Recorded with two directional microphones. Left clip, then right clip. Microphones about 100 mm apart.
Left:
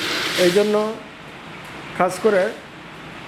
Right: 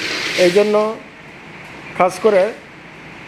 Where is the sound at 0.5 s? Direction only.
20° left (ahead or behind).